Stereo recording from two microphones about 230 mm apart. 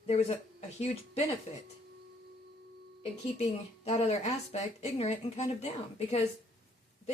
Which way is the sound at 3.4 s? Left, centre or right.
Left.